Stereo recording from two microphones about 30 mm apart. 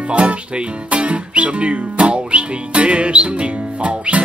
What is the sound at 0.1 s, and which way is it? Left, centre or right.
Speech, right.